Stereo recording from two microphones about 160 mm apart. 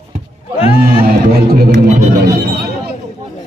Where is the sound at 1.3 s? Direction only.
75° right (ahead or behind).